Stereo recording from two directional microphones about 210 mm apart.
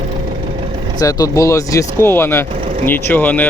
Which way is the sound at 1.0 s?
15° left (ahead or behind).